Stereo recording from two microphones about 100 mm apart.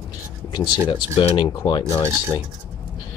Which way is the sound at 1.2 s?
55° left (ahead or behind).